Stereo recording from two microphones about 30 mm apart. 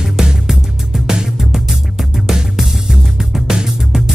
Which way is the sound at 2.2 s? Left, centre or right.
Centre.